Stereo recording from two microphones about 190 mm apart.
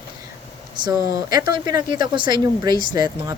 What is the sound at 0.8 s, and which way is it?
Speech, 25° right (ahead or behind).